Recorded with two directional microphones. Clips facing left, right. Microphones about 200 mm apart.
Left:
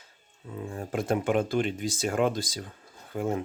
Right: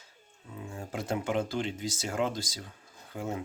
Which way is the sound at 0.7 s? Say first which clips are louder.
Left 6 dB; 55° left (ahead or behind).